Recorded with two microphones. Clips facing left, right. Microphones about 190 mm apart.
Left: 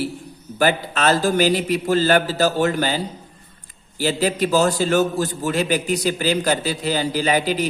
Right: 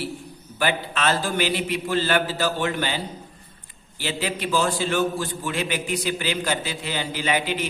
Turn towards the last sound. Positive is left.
turn(degrees=40)  # may be behind; listen again after turning